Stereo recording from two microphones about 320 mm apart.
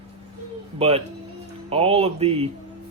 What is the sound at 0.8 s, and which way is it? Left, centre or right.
Speech, centre.